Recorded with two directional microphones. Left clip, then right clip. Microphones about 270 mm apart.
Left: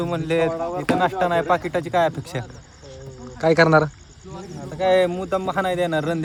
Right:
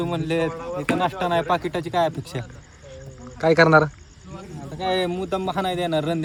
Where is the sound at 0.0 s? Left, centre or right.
Centre.